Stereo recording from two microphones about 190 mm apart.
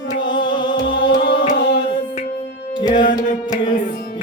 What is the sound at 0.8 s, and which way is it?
Music, 65° left (ahead or behind).